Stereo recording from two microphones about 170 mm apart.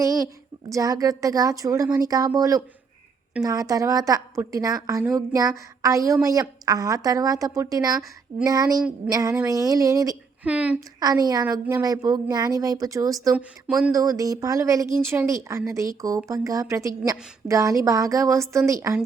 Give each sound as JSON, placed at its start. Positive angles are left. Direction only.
{"t": 0.7, "sound": "speech", "side_deg": -20}
{"t": 10.4, "sound": "a woman's voice", "side_deg": -10}
{"t": 11.0, "sound": "speech", "side_deg": -20}
{"t": 13.3, "sound": "speech", "side_deg": -5}
{"t": 13.9, "sound": "speech", "side_deg": -20}